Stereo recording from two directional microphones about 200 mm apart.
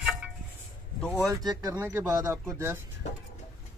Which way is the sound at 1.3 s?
20° right (ahead or behind).